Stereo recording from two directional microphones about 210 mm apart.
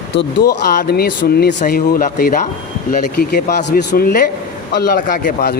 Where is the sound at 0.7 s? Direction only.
50° left (ahead or behind).